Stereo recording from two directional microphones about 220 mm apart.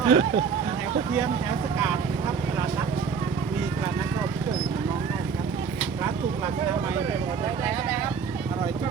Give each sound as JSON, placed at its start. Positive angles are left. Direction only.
{"t": 0.0, "sound": "speech", "side_deg": -25}